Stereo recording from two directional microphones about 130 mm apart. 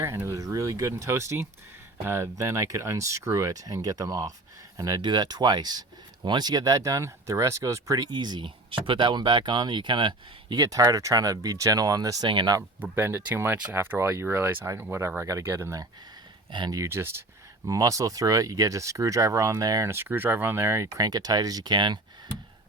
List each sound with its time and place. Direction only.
0.0 s speech: 20° right (ahead or behind); by 12.6 s 35° right (ahead or behind)
12.8 s speech: 15° right (ahead or behind); by 21.9 s 35° right (ahead or behind)